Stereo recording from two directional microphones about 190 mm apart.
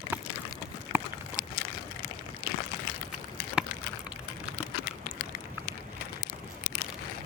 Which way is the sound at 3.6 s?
5° right (ahead or behind).